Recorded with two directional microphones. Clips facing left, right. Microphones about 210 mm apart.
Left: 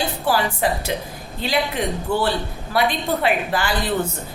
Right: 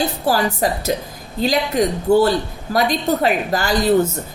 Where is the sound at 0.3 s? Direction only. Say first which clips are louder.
Right 1 dB; 40° right (ahead or behind).